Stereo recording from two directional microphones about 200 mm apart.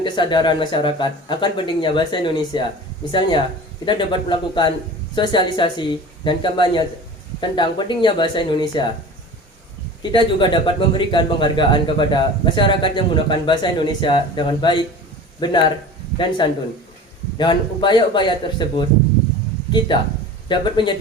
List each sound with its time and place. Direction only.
0.0 s speech: 25° left (ahead or behind)
10.0 s speech: 25° left (ahead or behind)
20.5 s speech: 25° left (ahead or behind)